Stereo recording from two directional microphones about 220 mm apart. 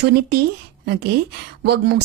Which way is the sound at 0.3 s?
45° right (ahead or behind).